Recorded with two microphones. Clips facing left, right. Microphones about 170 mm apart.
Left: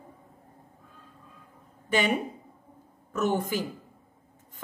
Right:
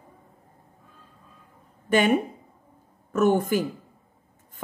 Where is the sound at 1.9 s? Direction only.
50° right (ahead or behind).